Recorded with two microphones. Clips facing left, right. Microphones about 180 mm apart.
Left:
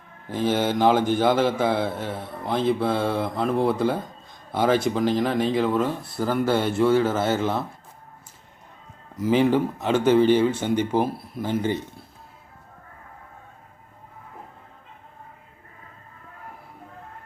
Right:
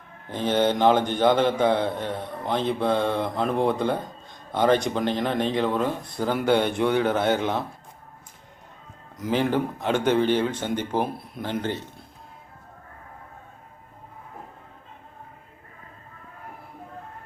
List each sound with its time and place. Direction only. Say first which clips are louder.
0.3 s a man's voice: even; 5° left (ahead or behind)
9.1 s speech: left 4 dB; 10° left (ahead or behind)